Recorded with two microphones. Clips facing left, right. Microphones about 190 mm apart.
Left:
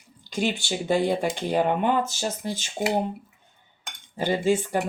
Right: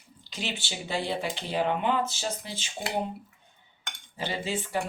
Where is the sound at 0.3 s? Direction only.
50° left (ahead or behind).